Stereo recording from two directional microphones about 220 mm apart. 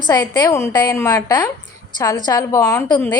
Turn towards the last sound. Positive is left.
turn(degrees=15)  # may be behind; listen again after turning